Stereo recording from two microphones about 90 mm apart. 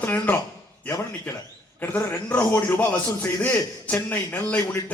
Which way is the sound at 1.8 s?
20° left (ahead or behind).